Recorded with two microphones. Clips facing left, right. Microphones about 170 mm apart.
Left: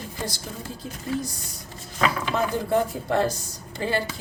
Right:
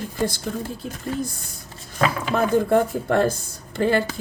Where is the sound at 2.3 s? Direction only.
55° right (ahead or behind).